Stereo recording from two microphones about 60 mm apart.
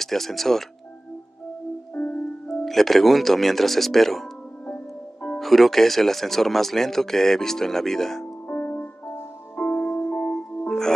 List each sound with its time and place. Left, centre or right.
0.0 s speech: centre
2.0 s music: left
2.4 s speech: centre
4.6 s music: left
5.4 s speech: centre
8.5 s music: left
10.7 s music: centre